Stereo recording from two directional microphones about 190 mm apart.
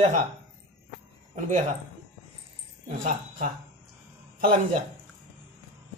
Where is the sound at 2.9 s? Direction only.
45° right (ahead or behind).